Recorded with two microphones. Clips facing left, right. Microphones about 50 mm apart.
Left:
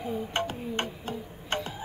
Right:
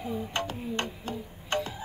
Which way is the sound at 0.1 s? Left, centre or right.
Left.